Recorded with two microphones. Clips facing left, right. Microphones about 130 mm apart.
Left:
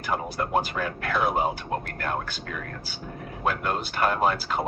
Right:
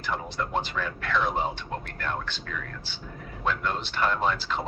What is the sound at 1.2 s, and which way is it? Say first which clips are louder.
Speech: left 7 dB; 10° left (ahead or behind).